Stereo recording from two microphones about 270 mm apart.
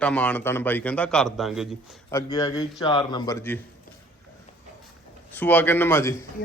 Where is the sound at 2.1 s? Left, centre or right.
Centre.